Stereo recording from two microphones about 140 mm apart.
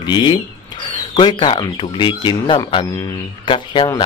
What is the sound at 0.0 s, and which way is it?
Speech, 35° left (ahead or behind).